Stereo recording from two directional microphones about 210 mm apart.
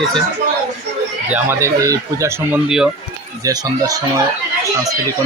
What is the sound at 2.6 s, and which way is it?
Speech, 5° right (ahead or behind).